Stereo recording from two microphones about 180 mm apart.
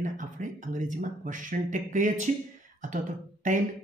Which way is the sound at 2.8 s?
45° right (ahead or behind).